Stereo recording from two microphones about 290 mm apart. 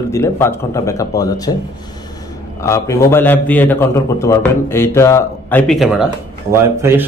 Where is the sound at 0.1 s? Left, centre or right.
Centre.